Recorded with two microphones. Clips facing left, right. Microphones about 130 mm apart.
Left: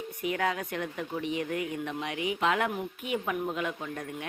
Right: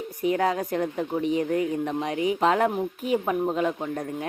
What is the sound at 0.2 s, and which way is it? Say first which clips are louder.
Speech: right 7 dB; 35° right (ahead or behind).